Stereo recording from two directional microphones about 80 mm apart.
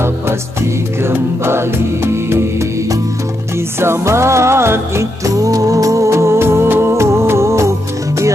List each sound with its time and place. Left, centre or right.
1.0 s music: right
3.8 s music: right